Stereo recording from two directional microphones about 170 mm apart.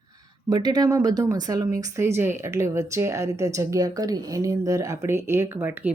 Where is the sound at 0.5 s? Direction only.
20° right (ahead or behind).